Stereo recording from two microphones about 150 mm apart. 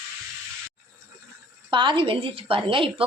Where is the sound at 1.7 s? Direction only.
30° right (ahead or behind).